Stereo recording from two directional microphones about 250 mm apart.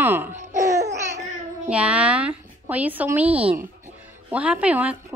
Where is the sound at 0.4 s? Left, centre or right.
Right.